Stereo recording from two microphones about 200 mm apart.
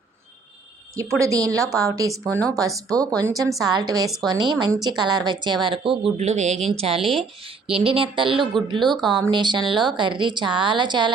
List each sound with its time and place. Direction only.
1.2 s speech: 15° right (ahead or behind)
2.2 s speech: 5° left (ahead or behind)
2.5 s speech: 15° right (ahead or behind)
7.0 s speech: centre (ahead or behind)
7.4 s speech: 25° right (ahead or behind)